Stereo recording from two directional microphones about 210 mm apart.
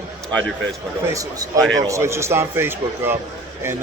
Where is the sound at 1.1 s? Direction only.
15° right (ahead or behind).